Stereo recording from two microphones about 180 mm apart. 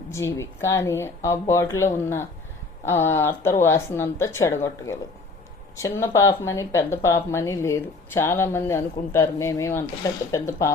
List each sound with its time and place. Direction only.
0.1 s speech: 15° left (ahead or behind)